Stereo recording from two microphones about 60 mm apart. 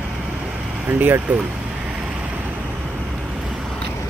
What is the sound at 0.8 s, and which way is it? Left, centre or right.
Vehicle, right.